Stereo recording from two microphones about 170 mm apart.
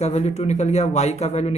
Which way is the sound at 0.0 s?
40° left (ahead or behind).